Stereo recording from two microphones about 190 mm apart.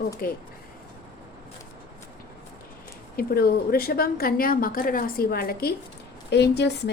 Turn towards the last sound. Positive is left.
turn(degrees=60)  # may be behind; listen again after turning